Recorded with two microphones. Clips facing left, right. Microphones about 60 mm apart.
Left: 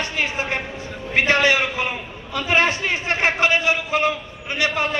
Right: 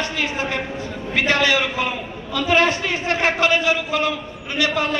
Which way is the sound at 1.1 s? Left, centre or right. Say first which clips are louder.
Left 1 dB; left.